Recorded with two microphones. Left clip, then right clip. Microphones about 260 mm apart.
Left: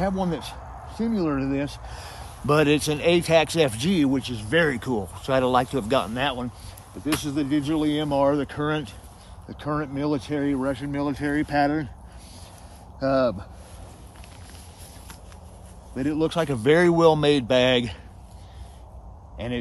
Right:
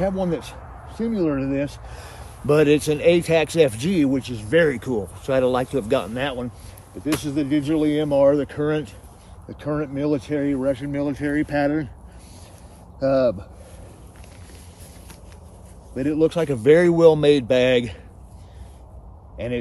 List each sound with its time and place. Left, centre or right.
0.0 s speech: centre
13.0 s speech: centre
15.9 s speech: centre
19.3 s speech: centre